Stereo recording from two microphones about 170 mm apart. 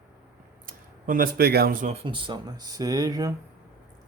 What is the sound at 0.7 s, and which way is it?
Speech, 55° right (ahead or behind).